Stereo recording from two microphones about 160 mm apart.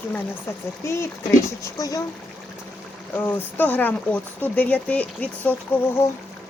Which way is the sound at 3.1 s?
10° left (ahead or behind).